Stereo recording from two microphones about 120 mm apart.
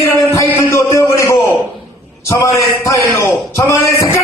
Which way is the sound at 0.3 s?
25° left (ahead or behind).